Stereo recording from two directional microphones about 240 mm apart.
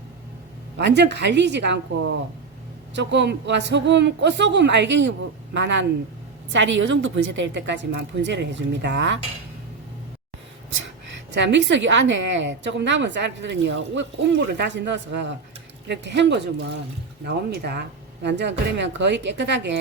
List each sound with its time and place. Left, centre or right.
0.8 s a woman's voice: right
11.3 s a woman's voice: right